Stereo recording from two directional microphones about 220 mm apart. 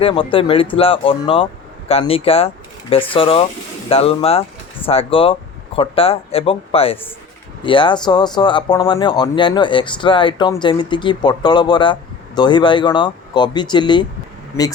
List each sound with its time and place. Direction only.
0.0 s speech: 25° left (ahead or behind)